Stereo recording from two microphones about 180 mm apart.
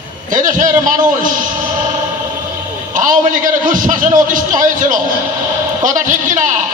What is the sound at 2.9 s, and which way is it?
A man's voice, 50° right (ahead or behind).